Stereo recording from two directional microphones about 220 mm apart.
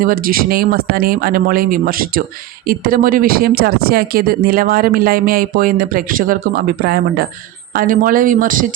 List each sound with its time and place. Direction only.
0.0 s speech: 40° right (ahead or behind)